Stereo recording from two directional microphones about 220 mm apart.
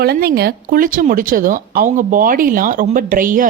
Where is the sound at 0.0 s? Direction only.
45° right (ahead or behind).